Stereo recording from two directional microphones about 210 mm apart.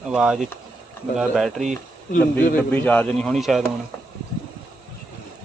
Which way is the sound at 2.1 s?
45° left (ahead or behind).